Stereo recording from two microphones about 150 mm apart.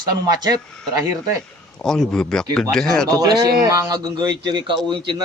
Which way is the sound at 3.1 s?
25° right (ahead or behind).